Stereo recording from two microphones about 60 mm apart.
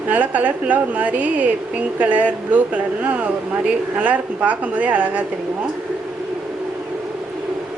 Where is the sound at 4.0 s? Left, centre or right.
Right.